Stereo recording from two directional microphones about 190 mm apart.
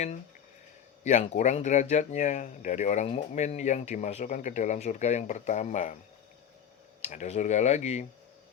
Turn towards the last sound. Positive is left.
turn(degrees=35)  # may be behind; listen again after turning